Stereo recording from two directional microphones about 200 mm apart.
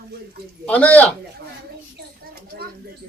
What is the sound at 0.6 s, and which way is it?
Speech, 5° left (ahead or behind).